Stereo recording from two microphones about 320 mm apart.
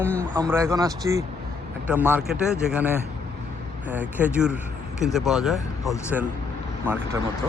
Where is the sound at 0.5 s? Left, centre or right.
Centre.